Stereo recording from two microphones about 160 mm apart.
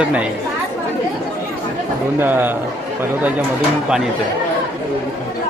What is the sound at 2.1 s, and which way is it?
Speech, 10° right (ahead or behind).